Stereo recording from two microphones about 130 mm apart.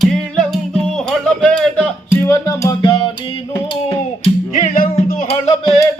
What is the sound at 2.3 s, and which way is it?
Music, 20° left (ahead or behind).